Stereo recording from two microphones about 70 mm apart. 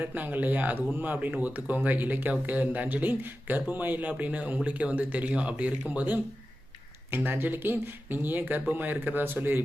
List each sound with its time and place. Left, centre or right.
0.0 s speech: right
7.1 s speech: right